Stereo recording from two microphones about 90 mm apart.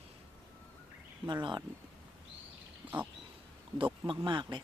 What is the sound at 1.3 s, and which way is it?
Speech, 55° right (ahead or behind).